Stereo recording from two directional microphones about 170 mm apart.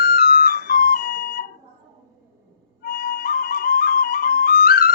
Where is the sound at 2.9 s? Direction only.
60° left (ahead or behind).